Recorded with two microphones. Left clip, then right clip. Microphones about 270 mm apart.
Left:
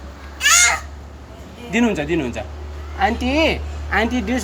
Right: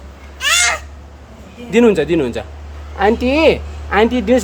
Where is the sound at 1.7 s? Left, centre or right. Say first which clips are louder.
Right 8 dB; centre.